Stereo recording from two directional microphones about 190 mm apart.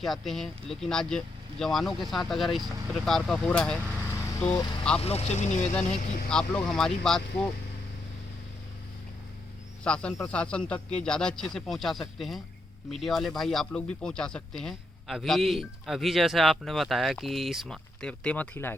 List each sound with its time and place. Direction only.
0.0 s speech: centre (ahead or behind)
4.1 s vehicle: 15° left (ahead or behind)
4.9 s speech: 35° left (ahead or behind)
6.3 s speech: 5° left (ahead or behind)
9.8 s speech: 5° left (ahead or behind)